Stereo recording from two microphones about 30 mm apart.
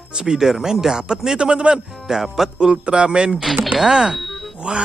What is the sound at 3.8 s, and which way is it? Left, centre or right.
Speech, centre.